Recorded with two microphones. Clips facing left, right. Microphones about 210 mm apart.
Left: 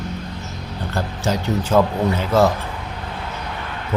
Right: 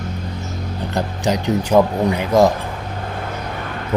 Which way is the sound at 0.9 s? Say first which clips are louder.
Right 2 dB; 15° right (ahead or behind).